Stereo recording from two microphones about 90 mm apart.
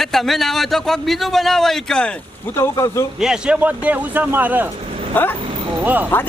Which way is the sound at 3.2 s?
5° right (ahead or behind).